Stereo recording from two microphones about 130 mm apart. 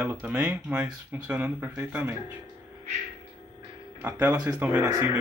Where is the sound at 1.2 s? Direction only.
10° right (ahead or behind).